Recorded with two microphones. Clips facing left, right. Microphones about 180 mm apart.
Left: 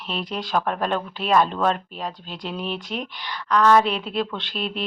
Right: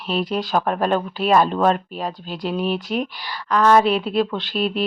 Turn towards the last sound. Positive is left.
turn(degrees=-5)  # may be behind; listen again after turning